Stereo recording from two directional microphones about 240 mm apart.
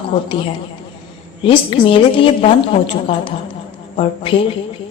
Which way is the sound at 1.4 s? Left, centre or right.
Left.